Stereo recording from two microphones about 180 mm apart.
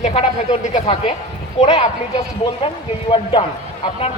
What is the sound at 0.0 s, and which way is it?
A man's voice, 30° left (ahead or behind).